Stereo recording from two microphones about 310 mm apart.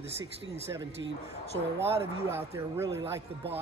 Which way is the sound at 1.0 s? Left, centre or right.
Right.